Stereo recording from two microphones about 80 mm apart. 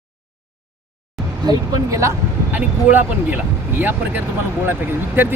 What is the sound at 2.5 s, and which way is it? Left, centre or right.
Speech, right.